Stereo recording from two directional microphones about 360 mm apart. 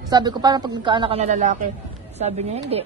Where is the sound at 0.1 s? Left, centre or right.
Centre.